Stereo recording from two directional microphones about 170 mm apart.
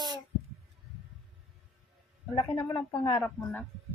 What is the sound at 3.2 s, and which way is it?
Speech, 10° left (ahead or behind).